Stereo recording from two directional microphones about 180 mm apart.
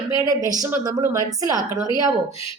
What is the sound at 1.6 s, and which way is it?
Speech, 20° left (ahead or behind).